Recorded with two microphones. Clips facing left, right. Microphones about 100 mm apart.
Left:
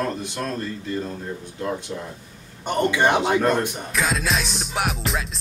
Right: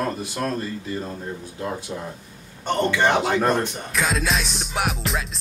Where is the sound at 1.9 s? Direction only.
25° right (ahead or behind).